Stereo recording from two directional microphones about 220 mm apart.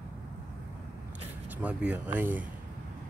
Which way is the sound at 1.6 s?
5° right (ahead or behind).